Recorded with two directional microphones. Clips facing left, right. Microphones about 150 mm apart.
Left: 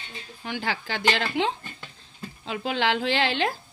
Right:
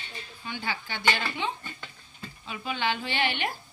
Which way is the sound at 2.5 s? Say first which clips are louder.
Left 5 dB; 85° left.